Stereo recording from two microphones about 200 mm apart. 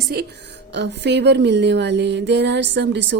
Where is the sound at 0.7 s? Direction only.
60° right (ahead or behind).